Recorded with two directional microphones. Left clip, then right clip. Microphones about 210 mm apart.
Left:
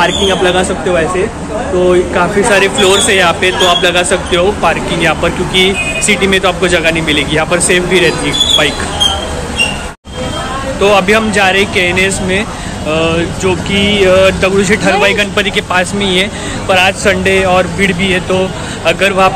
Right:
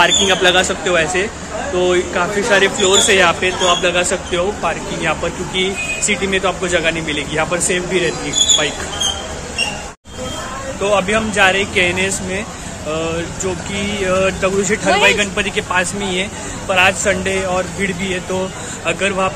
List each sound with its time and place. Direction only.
0.0 s speech: 35° right (ahead or behind)
1.9 s speech: 10° right (ahead or behind)
10.8 s speech: 5° right (ahead or behind)